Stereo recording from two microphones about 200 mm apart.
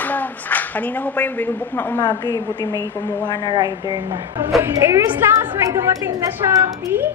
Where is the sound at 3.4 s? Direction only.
20° right (ahead or behind).